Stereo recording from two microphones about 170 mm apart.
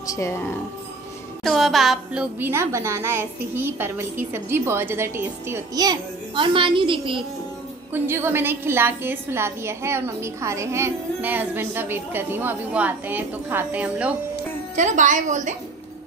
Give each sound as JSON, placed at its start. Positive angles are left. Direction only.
{"t": 0.0, "sound": "speech", "side_deg": 20}
{"t": 1.4, "sound": "music", "side_deg": 0}
{"t": 2.4, "sound": "a woman's voice", "side_deg": -15}
{"t": 7.9, "sound": "a woman's voice", "side_deg": -15}
{"t": 14.8, "sound": "a woman's voice", "side_deg": -45}